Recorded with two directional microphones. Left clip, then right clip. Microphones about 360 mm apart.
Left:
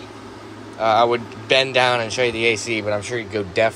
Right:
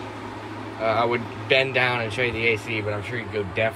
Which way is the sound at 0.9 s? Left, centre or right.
Centre.